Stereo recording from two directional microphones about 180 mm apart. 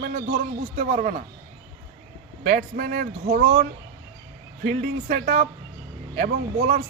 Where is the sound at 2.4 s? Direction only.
50° right (ahead or behind).